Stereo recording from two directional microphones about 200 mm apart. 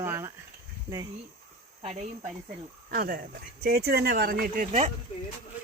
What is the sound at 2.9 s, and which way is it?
Speech, 45° right (ahead or behind).